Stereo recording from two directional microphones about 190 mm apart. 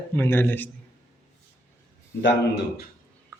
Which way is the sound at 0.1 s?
10° left (ahead or behind).